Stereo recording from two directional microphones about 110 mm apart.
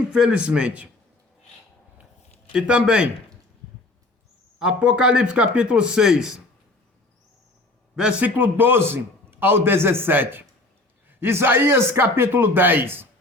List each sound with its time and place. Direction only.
0.1 s speech: 10° right (ahead or behind)
2.5 s speech: 10° right (ahead or behind)
4.6 s speech: 10° right (ahead or behind)
7.9 s a man's voice: 10° right (ahead or behind)